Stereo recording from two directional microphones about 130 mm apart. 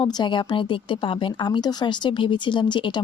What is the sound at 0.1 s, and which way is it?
Speech, 35° left (ahead or behind).